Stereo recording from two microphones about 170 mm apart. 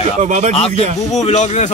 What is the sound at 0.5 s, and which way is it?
A man's voice, 35° left (ahead or behind).